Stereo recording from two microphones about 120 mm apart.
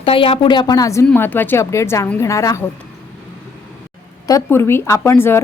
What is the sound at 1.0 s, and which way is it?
A woman's voice, 15° left (ahead or behind).